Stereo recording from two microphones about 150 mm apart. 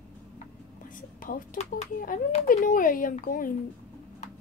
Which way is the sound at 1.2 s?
65° left (ahead or behind).